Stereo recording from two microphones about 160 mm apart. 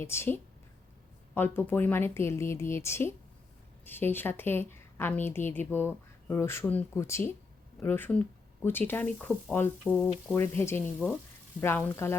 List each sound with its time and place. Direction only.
0.0 s a woman's voice: 15° left (ahead or behind)